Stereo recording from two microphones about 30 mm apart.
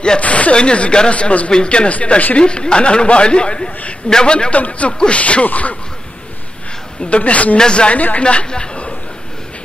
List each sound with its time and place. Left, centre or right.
0.2 s speech: left
0.6 s a man's voice: left
1.5 s a man's voice: left
1.9 s speech: left
2.3 s a man's voice: left
4.6 s speech: left
4.9 s a man's voice: left
5.2 s speech: left
7.1 s speech: left
7.5 s speech: left
7.9 s speech: left
8.2 s a man's voice: left